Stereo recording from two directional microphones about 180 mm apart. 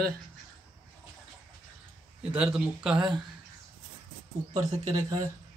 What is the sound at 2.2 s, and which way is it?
Speech, 5° right (ahead or behind).